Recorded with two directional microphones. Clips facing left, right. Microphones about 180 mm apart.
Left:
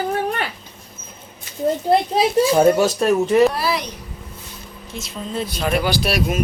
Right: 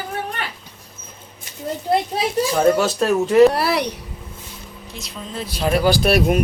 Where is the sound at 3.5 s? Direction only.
65° right (ahead or behind).